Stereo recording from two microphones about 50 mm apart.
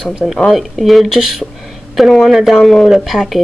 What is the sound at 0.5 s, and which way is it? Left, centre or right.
Speech, centre.